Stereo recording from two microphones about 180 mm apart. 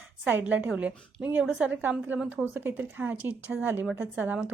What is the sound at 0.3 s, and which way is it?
A woman's voice, 10° right (ahead or behind).